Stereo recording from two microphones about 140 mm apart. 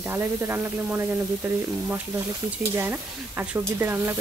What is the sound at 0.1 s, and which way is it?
Speech, 20° right (ahead or behind).